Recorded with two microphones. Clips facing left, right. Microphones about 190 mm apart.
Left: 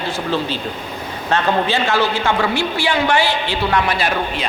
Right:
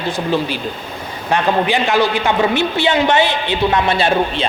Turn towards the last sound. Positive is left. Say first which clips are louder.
# right 5 dB
turn(degrees=-25)  # may be behind; listen again after turning